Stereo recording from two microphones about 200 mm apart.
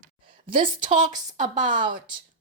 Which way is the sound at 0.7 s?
40° right (ahead or behind).